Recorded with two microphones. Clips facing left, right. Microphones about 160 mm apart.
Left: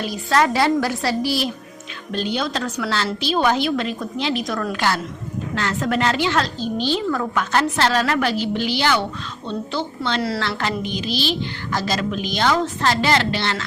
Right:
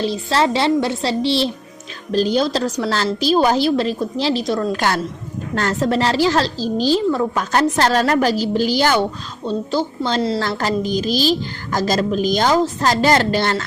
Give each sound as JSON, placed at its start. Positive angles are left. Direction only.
{"t": 0.0, "sound": "a woman's voice", "side_deg": -30}
{"t": 2.1, "sound": "a woman's voice", "side_deg": -40}
{"t": 5.8, "sound": "a woman's voice", "side_deg": -30}
{"t": 10.2, "sound": "a woman's voice", "side_deg": -25}
{"t": 10.6, "sound": "a woman's voice", "side_deg": -40}